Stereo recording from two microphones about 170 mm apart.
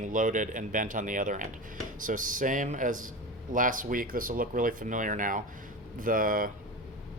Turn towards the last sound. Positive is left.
turn(degrees=-55)  # may be behind; listen again after turning